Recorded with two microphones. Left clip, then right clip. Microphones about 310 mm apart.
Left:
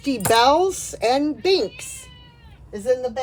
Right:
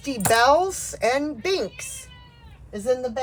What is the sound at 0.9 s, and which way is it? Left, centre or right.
Speech, centre.